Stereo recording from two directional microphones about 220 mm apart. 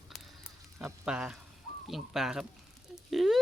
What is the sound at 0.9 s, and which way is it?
Speech, 5° right (ahead or behind).